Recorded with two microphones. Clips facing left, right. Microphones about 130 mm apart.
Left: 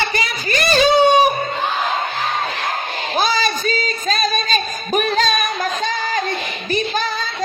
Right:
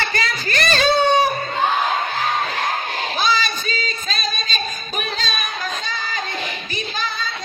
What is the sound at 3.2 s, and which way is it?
Female singing, 45° left (ahead or behind).